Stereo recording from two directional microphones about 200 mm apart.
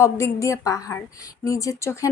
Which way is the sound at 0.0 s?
15° left (ahead or behind).